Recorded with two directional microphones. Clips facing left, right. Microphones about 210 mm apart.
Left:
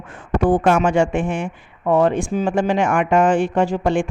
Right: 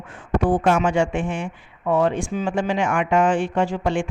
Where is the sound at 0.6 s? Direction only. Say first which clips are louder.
Left 3 dB; 50° left (ahead or behind).